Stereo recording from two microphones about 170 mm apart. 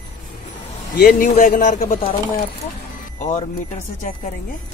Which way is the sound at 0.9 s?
60° left (ahead or behind).